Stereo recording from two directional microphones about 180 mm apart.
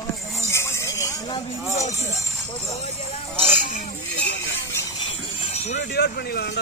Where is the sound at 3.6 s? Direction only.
50° left (ahead or behind).